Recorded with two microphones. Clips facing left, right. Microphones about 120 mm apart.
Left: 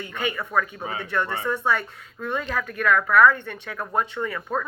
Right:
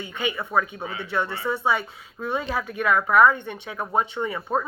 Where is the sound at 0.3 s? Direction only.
10° right (ahead or behind).